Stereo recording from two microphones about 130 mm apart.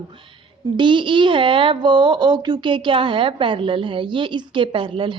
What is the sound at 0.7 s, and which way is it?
A woman's voice, 40° right (ahead or behind).